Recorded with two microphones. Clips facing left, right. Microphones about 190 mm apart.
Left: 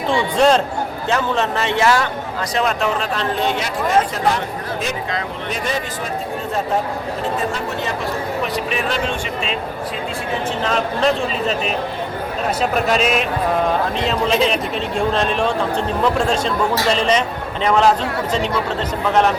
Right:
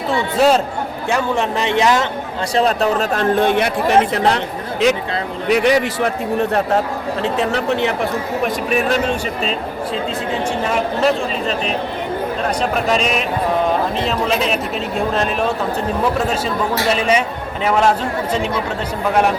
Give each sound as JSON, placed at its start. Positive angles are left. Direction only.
{"t": 0.3, "sound": "a man's voice", "side_deg": -5}
{"t": 2.6, "sound": "speech", "side_deg": -35}
{"t": 4.1, "sound": "speech", "side_deg": -70}
{"t": 7.2, "sound": "speech", "side_deg": -70}
{"t": 10.7, "sound": "a man's voice", "side_deg": -10}
{"t": 12.9, "sound": "speech", "side_deg": 0}
{"t": 14.5, "sound": "a man's voice", "side_deg": -5}